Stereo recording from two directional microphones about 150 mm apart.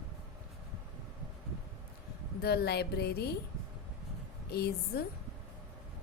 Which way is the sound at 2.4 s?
90° left.